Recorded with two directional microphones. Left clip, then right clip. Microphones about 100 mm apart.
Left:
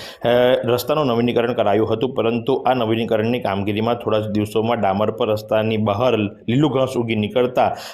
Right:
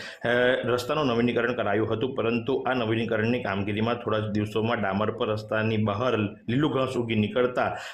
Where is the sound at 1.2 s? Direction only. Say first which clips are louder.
Left 7 dB; 35° left (ahead or behind).